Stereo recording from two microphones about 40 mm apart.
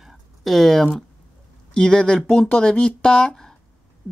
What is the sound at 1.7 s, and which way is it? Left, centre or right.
A woman's voice, left.